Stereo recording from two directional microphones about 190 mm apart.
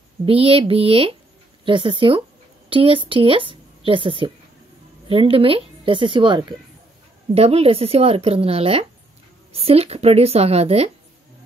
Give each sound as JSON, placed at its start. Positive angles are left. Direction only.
{"t": 0.2, "sound": "a woman's voice", "side_deg": -30}